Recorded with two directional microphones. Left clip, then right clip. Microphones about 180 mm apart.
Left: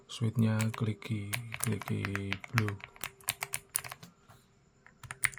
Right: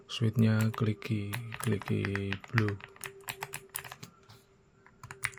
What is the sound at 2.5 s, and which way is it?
Typing, 15° left (ahead or behind).